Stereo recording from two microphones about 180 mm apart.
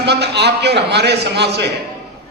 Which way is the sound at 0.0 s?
70° right (ahead or behind).